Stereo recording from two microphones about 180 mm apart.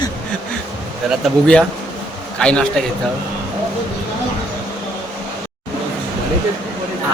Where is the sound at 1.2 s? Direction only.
5° left (ahead or behind).